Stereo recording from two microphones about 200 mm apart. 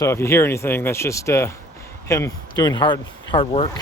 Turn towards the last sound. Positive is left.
turn(degrees=25)  # may be behind; listen again after turning